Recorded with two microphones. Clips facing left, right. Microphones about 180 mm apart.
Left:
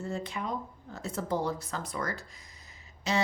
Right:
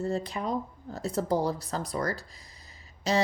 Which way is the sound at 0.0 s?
35° right (ahead or behind).